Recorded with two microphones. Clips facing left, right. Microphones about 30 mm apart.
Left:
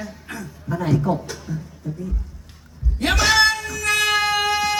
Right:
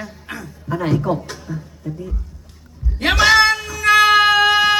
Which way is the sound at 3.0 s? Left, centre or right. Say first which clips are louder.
Right 4 dB; right.